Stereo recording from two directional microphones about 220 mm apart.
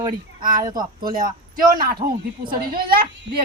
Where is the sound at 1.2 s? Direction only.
40° right (ahead or behind).